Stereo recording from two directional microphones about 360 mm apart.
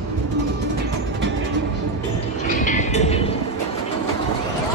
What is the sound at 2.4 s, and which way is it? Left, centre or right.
Music, left.